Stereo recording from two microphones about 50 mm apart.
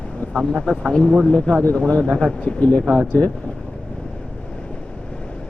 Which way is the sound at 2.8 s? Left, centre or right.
Centre.